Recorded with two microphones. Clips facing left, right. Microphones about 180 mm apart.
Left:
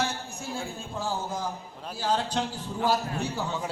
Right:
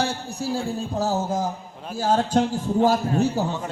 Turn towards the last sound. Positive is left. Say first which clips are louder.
# right 9 dB
turn(degrees=-45)  # may be behind; listen again after turning